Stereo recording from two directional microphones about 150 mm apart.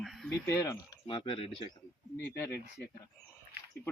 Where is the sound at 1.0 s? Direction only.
35° left (ahead or behind).